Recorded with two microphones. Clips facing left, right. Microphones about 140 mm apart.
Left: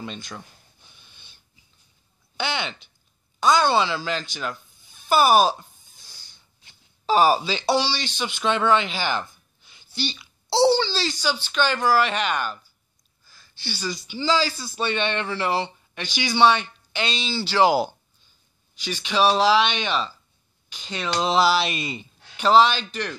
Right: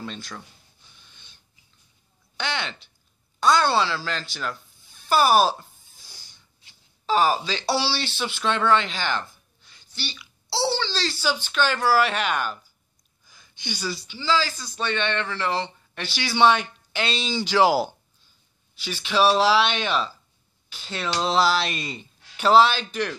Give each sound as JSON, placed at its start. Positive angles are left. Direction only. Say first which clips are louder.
{"t": 0.0, "sound": "speech", "louder": "even", "side_deg": 5}
{"t": 2.3, "sound": "a woman's voice", "louder": "left 2 dB", "side_deg": 5}
{"t": 7.1, "sound": "speech", "louder": "left 3 dB", "side_deg": 15}
{"t": 7.7, "sound": "speech", "louder": "left 2 dB", "side_deg": -5}
{"t": 10.5, "sound": "speech", "louder": "left 7 dB", "side_deg": 15}
{"t": 11.1, "sound": "a woman's voice", "louder": "right 1 dB", "side_deg": -10}
{"t": 13.3, "sound": "a sound", "louder": "right 1 dB", "side_deg": -15}
{"t": 14.0, "sound": "speech", "louder": "left 2 dB", "side_deg": 20}
{"t": 16.0, "sound": "a woman's voice", "louder": "left 1 dB", "side_deg": -5}
{"t": 17.3, "sound": "speech", "louder": "right 2 dB", "side_deg": -15}
{"t": 17.6, "sound": "a woman's voice", "louder": "left 1 dB", "side_deg": -5}
{"t": 18.9, "sound": "a woman's voice", "louder": "even", "side_deg": -5}
{"t": 22.4, "sound": "speech", "louder": "even", "side_deg": -5}